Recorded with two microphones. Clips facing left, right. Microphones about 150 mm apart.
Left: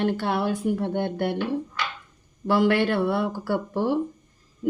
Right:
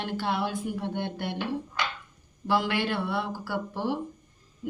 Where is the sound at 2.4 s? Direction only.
55° left (ahead or behind).